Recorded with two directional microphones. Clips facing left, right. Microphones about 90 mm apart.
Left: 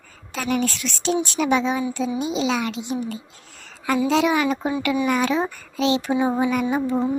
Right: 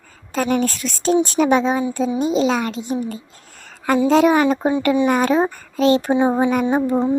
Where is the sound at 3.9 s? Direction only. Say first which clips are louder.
Right 5 dB; 40° right (ahead or behind).